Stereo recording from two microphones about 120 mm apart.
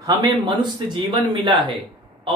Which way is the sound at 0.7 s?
40° right (ahead or behind).